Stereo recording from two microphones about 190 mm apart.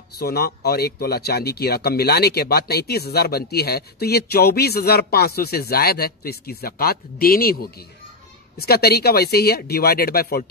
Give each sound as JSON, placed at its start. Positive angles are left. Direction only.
{"t": 0.2, "sound": "speech", "side_deg": 55}